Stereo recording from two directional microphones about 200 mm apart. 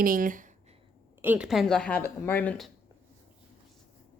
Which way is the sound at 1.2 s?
5° right (ahead or behind).